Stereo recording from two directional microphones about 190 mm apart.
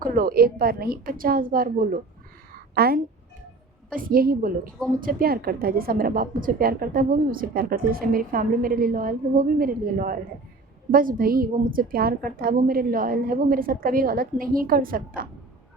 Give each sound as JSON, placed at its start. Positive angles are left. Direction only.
{"t": 0.0, "sound": "a woman's voice", "side_deg": -45}